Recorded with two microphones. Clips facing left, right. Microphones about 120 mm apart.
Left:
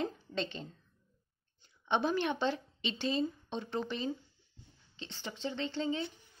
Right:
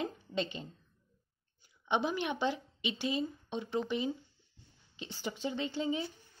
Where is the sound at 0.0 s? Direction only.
5° right (ahead or behind).